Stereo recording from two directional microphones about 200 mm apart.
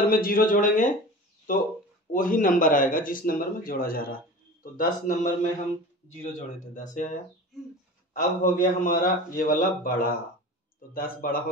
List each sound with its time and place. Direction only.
0.1 s speech: 45° left (ahead or behind)
2.1 s speech: 45° left (ahead or behind)
8.2 s speech: 40° left (ahead or behind)